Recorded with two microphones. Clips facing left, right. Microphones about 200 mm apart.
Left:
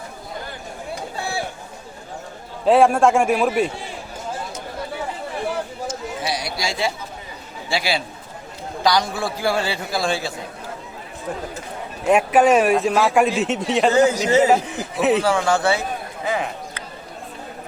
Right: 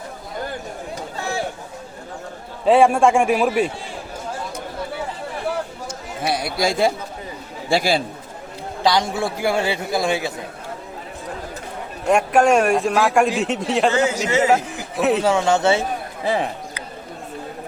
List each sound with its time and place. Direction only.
2.6 s a man's voice: centre (ahead or behind)
6.2 s speech: 55° right (ahead or behind)
8.8 s a man's voice: 25° right (ahead or behind)
12.0 s a man's voice: 5° left (ahead or behind)
14.1 s a man's voice: 35° left (ahead or behind)
14.5 s a man's voice: centre (ahead or behind)
15.2 s a man's voice: 20° right (ahead or behind)